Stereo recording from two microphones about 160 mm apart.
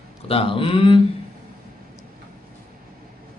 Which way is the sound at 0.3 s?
35° left (ahead or behind).